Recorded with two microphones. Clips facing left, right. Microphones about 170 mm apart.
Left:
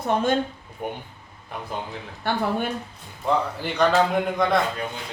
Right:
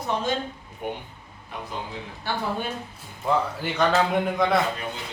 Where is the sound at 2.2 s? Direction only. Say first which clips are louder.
Left 4 dB; 55° left (ahead or behind).